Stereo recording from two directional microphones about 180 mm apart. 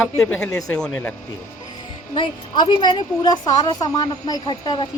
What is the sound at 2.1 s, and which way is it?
A woman's voice, 25° left (ahead or behind).